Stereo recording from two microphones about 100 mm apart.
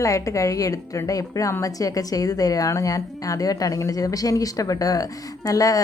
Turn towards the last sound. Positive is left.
turn(degrees=35)  # may be behind; listen again after turning